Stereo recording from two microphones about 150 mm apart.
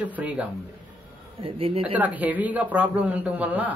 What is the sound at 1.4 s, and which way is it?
Speech, 40° right (ahead or behind).